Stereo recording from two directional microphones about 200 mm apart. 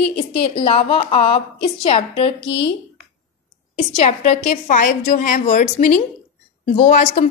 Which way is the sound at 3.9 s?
35° left (ahead or behind).